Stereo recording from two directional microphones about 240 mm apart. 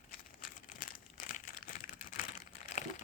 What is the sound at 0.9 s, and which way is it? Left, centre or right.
Crumpling, left.